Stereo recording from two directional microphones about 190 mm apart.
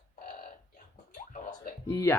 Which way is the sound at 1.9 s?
15° left (ahead or behind).